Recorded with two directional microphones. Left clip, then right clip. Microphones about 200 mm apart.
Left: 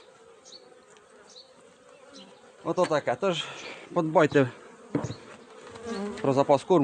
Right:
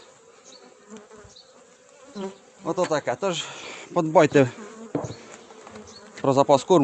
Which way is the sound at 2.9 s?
40° right (ahead or behind).